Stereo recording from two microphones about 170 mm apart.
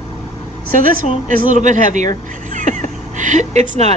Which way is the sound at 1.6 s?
45° right (ahead or behind).